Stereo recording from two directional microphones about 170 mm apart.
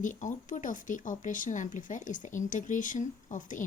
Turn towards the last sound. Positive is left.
turn(degrees=50)  # may be behind; listen again after turning